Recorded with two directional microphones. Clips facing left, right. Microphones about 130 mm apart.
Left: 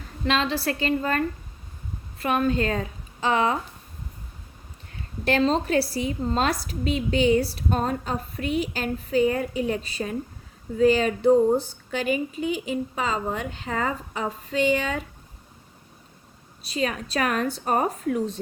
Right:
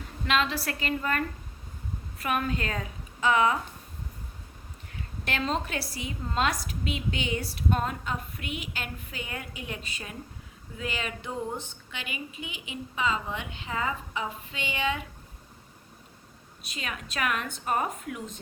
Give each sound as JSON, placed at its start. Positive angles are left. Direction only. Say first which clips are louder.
{"t": 0.3, "sound": "a woman's voice", "louder": "left 4 dB", "side_deg": 30}
{"t": 5.2, "sound": "a woman's voice", "louder": "left 8 dB", "side_deg": 35}
{"t": 16.6, "sound": "a woman's voice", "louder": "left 11 dB", "side_deg": 35}